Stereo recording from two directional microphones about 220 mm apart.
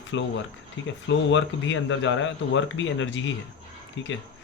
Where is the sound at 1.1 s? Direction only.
55° left (ahead or behind).